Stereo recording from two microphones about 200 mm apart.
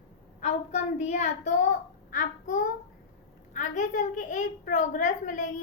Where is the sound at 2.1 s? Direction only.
40° left (ahead or behind).